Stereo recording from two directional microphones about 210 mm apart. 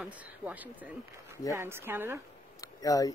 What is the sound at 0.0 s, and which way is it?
Speech, 5° right (ahead or behind).